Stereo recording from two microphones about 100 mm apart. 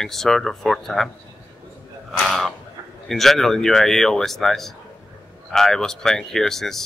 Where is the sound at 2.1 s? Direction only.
Centre (ahead or behind).